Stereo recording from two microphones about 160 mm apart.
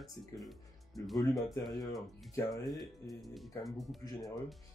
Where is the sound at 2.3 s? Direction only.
20° left (ahead or behind).